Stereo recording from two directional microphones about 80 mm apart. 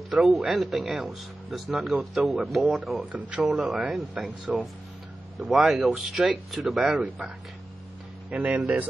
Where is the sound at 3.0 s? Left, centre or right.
Centre.